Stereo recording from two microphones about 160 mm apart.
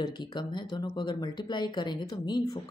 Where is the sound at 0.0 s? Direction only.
30° left (ahead or behind).